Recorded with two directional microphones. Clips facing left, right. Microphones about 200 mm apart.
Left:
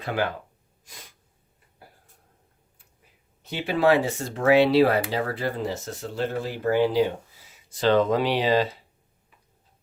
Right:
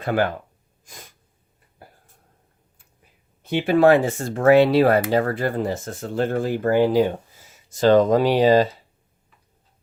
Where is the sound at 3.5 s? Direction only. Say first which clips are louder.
Right 5 dB; 50° right (ahead or behind).